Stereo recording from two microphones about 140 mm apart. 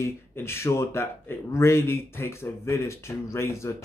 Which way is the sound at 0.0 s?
20° left (ahead or behind).